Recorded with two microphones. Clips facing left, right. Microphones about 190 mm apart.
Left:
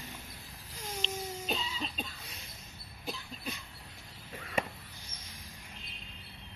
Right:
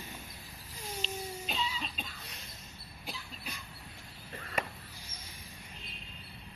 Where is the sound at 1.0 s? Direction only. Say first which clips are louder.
Left 2 dB; 10° right (ahead or behind).